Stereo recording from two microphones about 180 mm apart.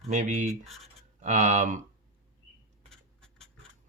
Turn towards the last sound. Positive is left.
turn(degrees=5)  # may be behind; listen again after turning